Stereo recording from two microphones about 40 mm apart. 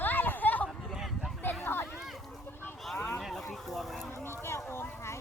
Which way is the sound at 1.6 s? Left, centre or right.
Left.